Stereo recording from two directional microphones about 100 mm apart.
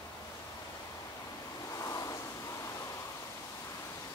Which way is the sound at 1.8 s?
35° left (ahead or behind).